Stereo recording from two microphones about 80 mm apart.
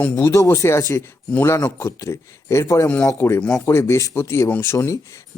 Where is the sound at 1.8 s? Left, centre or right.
Left.